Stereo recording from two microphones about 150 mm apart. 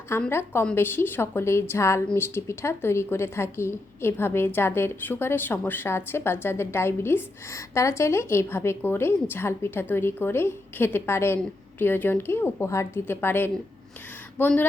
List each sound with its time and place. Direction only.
0.3 s a woman's voice: 15° left (ahead or behind)